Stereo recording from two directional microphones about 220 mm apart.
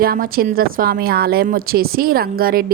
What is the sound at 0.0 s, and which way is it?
A woman's voice, 40° right (ahead or behind).